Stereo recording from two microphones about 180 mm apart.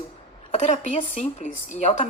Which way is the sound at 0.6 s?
40° left (ahead or behind).